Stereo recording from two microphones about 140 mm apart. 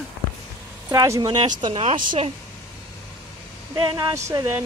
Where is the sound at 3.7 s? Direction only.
25° right (ahead or behind).